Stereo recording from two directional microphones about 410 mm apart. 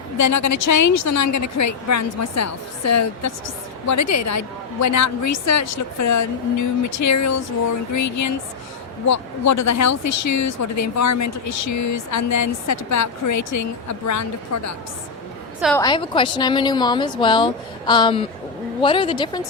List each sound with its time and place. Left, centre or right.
0.2 s a woman's voice: left
15.6 s a woman's voice: centre